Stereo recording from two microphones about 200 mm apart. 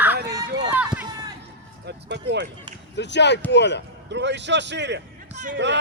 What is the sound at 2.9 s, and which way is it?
Speech, 60° left (ahead or behind).